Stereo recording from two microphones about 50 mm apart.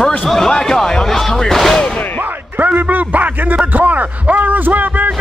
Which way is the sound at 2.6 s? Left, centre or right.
Right.